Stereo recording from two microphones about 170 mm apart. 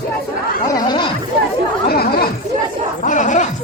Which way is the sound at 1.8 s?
65° left (ahead or behind).